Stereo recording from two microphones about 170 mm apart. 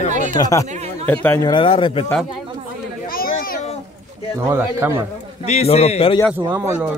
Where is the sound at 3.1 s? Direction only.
60° left (ahead or behind).